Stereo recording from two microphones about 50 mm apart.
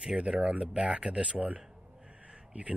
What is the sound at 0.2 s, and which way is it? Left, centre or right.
Speech, centre.